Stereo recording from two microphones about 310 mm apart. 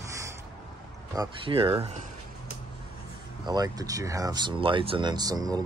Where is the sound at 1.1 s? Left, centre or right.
Centre.